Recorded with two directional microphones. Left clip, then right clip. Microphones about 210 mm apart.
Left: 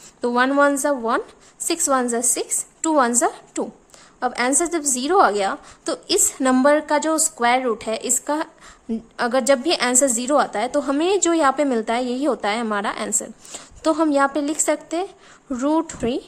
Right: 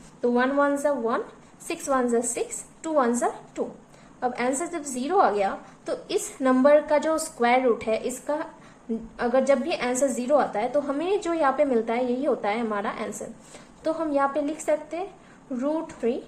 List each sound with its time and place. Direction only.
0.2 s a woman's voice: 40° left (ahead or behind)